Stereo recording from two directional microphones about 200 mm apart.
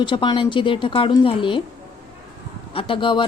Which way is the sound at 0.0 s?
20° left (ahead or behind).